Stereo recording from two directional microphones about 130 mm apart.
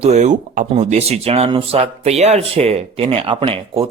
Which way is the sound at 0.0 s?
60° right (ahead or behind).